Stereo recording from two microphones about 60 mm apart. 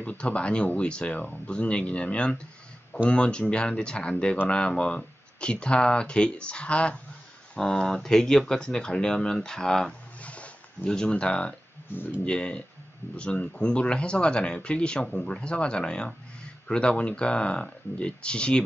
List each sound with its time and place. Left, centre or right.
0.0 s speech: left
10.2 s roaring cats: left
10.9 s speech: centre
11.9 s speech: left
12.3 s speech: centre